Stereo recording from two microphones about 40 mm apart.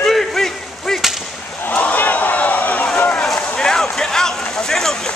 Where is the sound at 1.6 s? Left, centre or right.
Left.